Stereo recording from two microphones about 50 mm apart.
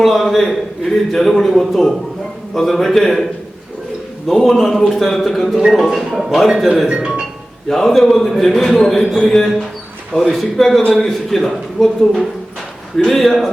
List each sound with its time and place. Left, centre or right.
0.0 s a man's voice: centre
4.4 s a man's voice: centre
5.9 s a man's voice: centre
6.8 s speech: centre
7.7 s a man's voice: centre